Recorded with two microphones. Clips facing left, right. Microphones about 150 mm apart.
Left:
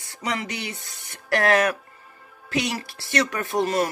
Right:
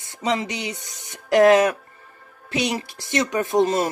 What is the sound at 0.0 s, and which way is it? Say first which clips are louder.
Speech: right 5 dB; 20° right (ahead or behind).